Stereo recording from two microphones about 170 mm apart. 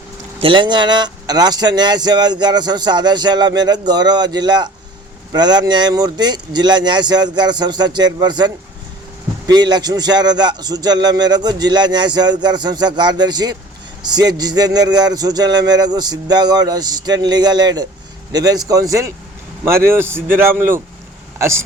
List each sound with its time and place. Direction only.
0.4 s speech: 30° right (ahead or behind)